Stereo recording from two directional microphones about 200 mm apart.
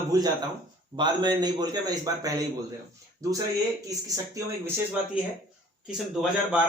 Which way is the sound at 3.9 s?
15° right (ahead or behind).